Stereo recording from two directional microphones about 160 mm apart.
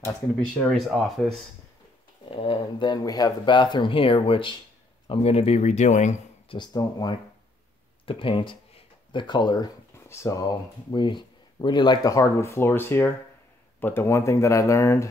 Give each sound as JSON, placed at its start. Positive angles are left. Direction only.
{"t": 0.4, "sound": "speech", "side_deg": 0}
{"t": 2.3, "sound": "speech", "side_deg": 35}
{"t": 6.5, "sound": "speech", "side_deg": 25}
{"t": 9.9, "sound": "a sound", "side_deg": 15}
{"t": 10.9, "sound": "speech", "side_deg": 30}